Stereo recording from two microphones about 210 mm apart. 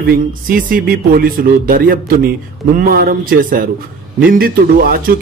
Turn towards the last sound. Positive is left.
turn(degrees=-45)  # may be behind; listen again after turning